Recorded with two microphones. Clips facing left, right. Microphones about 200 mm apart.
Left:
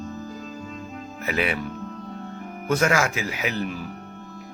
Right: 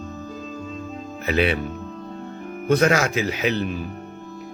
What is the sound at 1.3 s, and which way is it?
Speech, 25° right (ahead or behind).